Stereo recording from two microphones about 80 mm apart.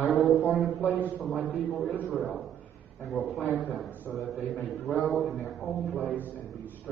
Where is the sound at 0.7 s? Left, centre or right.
Left.